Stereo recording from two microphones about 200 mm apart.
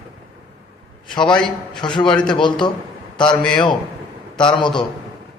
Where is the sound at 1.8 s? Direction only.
25° left (ahead or behind).